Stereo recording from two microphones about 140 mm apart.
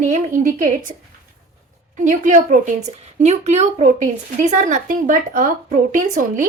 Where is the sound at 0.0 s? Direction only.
60° right (ahead or behind).